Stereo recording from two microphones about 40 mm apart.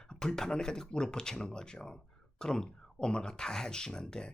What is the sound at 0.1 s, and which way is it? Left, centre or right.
Speech, centre.